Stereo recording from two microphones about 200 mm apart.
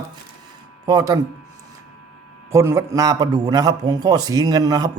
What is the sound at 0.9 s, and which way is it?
Speech, 15° right (ahead or behind).